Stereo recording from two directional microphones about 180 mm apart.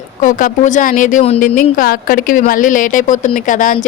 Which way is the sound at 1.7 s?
50° left (ahead or behind).